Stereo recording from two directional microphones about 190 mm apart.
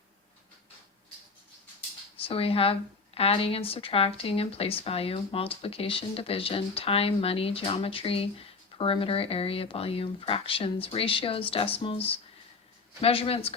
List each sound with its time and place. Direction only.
2.1 s speech: 30° left (ahead or behind)